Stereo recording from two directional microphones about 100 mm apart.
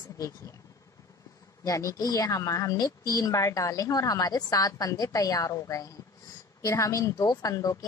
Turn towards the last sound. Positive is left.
turn(degrees=35)  # may be behind; listen again after turning